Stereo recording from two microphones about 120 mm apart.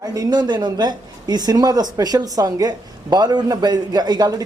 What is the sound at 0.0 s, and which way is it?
Speech, 30° right (ahead or behind).